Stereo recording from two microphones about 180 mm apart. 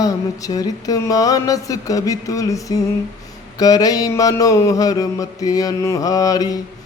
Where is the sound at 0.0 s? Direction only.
20° left (ahead or behind).